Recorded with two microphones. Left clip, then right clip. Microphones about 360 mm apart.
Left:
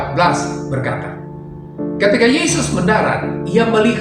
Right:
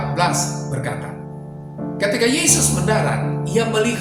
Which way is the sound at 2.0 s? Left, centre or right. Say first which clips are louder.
Left 6 dB; right.